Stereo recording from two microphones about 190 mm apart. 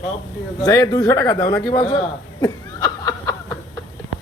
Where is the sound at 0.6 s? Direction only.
20° left (ahead or behind).